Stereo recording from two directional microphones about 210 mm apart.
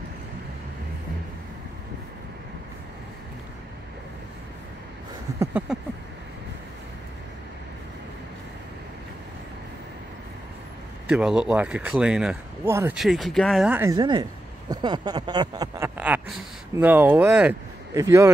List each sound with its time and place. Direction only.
5.4 s speech: 10° right (ahead or behind)
11.1 s speech: 5° right (ahead or behind); by 14.2 s 20° right (ahead or behind)
14.7 s a sound: 20° right (ahead or behind)
16.7 s speech: 10° right (ahead or behind)